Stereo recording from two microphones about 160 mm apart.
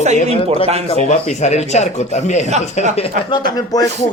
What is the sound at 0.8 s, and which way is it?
A man's voice, 45° left (ahead or behind).